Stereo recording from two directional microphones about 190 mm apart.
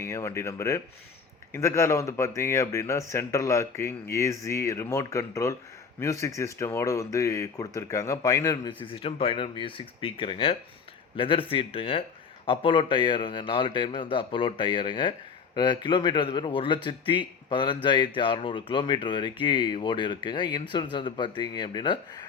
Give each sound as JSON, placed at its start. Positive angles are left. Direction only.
{"t": 0.0, "sound": "speech", "side_deg": 15}